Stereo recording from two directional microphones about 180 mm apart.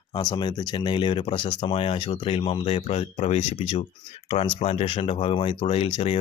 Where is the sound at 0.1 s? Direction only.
20° left (ahead or behind).